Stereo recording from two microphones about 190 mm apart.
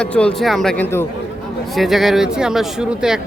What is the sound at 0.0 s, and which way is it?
Speech, 5° left (ahead or behind).